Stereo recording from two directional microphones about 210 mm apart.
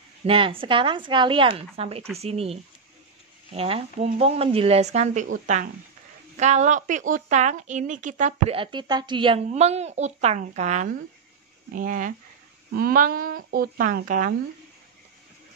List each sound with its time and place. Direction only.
0.3 s a woman's voice: 25° right (ahead or behind)